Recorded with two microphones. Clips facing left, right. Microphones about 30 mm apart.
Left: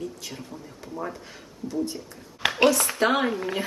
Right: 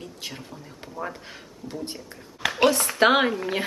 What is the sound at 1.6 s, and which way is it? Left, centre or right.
Speech, right.